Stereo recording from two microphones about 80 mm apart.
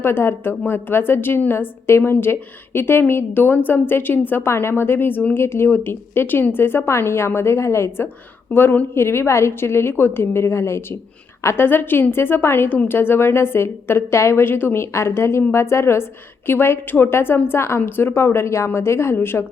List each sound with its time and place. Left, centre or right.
0.0 s a woman's voice: left